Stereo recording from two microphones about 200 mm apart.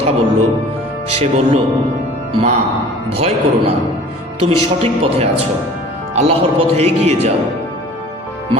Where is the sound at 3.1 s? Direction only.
30° right (ahead or behind).